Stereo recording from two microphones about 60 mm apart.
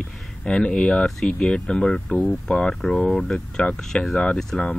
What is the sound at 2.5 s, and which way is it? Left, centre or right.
Speech, centre.